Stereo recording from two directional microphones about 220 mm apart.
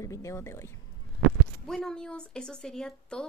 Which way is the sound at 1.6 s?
Centre (ahead or behind).